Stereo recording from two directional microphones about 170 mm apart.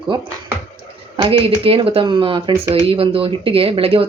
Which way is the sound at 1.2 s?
30° right (ahead or behind).